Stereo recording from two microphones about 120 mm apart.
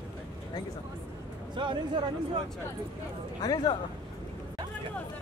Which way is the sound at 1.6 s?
45° right (ahead or behind).